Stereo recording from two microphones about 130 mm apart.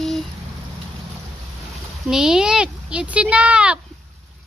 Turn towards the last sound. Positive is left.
turn(degrees=-10)  # may be behind; listen again after turning